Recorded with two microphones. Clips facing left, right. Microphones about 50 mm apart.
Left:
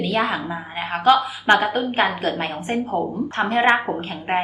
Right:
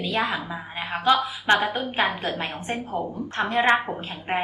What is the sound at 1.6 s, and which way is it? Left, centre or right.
Speech, left.